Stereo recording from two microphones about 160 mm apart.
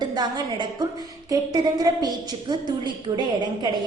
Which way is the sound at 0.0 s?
25° right (ahead or behind).